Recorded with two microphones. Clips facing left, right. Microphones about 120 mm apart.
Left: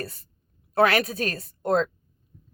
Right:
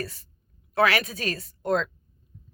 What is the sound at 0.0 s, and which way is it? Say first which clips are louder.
Speech: right 1 dB; 45° left (ahead or behind).